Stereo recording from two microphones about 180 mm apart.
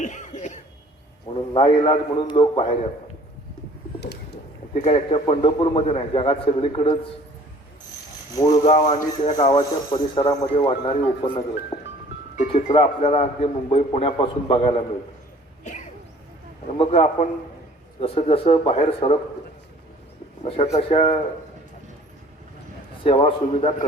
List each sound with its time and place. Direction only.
0.0 s cough: 40° left (ahead or behind)
1.3 s a man's voice: 30° left (ahead or behind)
4.7 s a man's voice: 40° left (ahead or behind)
8.4 s a man's voice: 20° left (ahead or behind)
8.6 s a man's voice: 40° left (ahead or behind)
12.5 s a man's voice: 35° left (ahead or behind)
15.6 s a sound: 40° left (ahead or behind)
16.7 s a man's voice: 30° left (ahead or behind)
20.7 s a man's voice: 35° left (ahead or behind)
23.0 s a man's voice: 30° left (ahead or behind)